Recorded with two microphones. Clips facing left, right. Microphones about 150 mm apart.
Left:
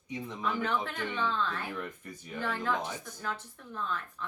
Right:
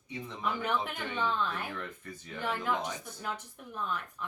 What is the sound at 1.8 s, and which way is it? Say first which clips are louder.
Speech: left 2 dB; 15° left (ahead or behind).